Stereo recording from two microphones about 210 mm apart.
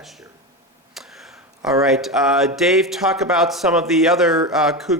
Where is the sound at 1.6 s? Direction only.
Centre (ahead or behind).